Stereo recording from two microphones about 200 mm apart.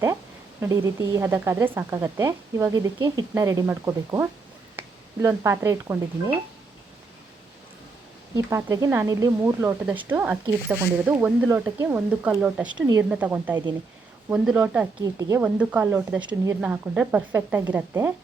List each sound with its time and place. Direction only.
0.6 s speech: 15° right (ahead or behind)
8.4 s speech: 15° right (ahead or behind)